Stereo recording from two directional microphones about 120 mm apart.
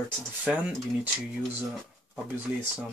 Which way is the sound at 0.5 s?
5° right (ahead or behind).